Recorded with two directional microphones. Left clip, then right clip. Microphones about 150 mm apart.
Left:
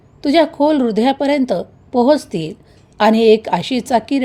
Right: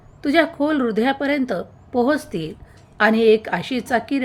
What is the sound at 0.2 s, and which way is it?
A woman's voice, 30° left (ahead or behind).